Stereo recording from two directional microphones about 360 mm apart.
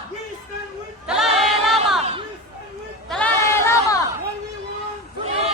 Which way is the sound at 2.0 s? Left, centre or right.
Centre.